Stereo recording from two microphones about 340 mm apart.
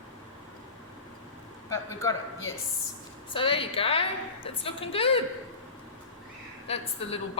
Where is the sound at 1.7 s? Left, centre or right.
Centre.